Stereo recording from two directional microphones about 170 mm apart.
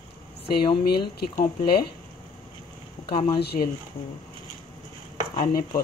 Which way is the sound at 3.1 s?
30° left (ahead or behind).